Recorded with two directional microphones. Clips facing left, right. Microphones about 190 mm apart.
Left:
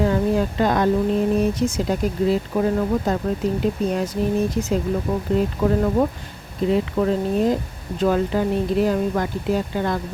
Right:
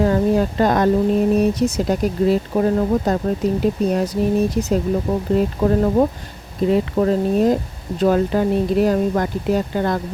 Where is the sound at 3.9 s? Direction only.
35° right (ahead or behind).